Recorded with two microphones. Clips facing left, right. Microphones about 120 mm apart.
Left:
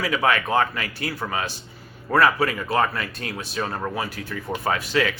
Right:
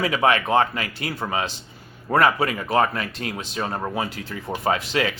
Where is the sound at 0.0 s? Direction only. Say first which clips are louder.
Right 2 dB; 30° right (ahead or behind).